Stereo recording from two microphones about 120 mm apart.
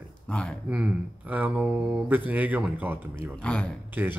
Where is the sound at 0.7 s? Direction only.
10° right (ahead or behind).